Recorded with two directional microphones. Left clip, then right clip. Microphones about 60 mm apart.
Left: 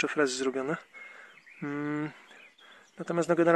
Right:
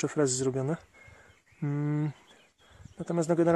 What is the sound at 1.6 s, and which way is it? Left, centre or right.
Speech, centre.